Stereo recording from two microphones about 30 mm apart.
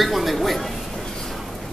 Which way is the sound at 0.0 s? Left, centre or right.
Centre.